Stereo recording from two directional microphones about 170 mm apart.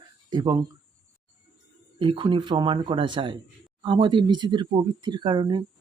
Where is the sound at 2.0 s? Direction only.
30° right (ahead or behind).